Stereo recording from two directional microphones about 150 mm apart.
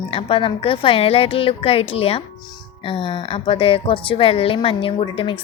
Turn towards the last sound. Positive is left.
turn(degrees=35)  # may be behind; listen again after turning